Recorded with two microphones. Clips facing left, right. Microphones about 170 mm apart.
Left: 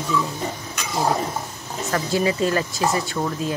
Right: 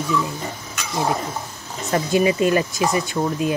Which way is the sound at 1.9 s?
20° right (ahead or behind).